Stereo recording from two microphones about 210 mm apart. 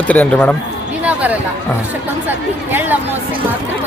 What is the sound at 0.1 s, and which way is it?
Speech, 5° left (ahead or behind).